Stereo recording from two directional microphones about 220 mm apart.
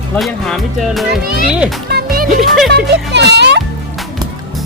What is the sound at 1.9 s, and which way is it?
Music, 45° right (ahead or behind).